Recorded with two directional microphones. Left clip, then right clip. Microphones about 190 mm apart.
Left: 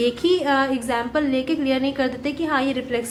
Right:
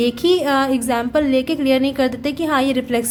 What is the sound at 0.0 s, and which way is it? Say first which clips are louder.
Speech: right 3 dB; 30° right (ahead or behind).